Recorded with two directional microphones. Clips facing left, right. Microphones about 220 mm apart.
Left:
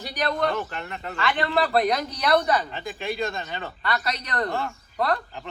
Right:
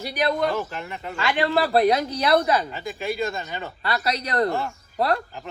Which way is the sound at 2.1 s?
30° right (ahead or behind).